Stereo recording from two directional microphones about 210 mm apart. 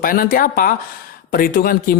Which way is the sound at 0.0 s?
40° left (ahead or behind).